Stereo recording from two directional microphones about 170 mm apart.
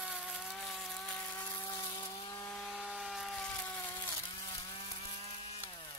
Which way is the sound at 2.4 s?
Centre (ahead or behind).